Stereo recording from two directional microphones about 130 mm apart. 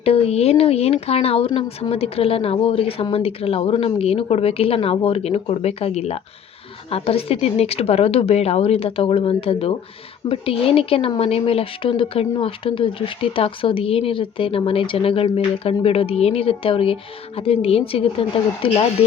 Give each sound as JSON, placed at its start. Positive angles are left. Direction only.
{"t": 0.0, "sound": "speech", "side_deg": 50}